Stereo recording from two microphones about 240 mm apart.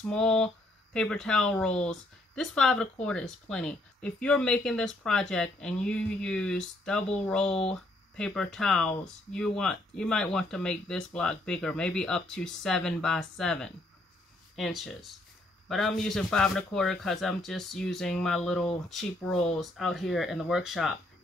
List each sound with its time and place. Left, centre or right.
0.0 s speech: centre